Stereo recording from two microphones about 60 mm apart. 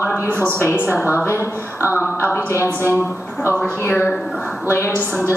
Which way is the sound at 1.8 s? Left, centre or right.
Right.